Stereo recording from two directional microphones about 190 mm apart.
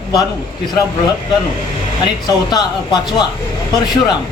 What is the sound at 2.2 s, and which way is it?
A man's voice, 20° left (ahead or behind).